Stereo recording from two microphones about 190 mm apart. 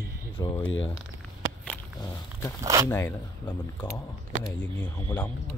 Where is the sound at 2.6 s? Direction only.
15° right (ahead or behind).